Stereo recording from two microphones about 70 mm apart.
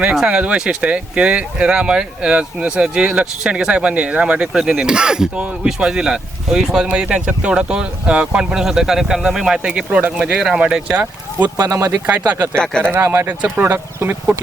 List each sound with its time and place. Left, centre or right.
0.0 s speech: centre
11.5 s speech: right
12.0 s speech: right
12.5 s speech: centre
12.9 s speech: right